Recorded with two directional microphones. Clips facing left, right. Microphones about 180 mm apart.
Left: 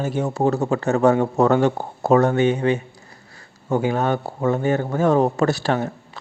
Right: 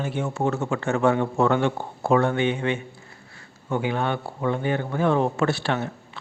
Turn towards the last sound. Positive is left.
turn(degrees=40)  # may be behind; listen again after turning